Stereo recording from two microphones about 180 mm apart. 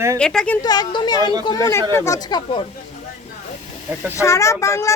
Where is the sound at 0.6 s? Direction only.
20° left (ahead or behind).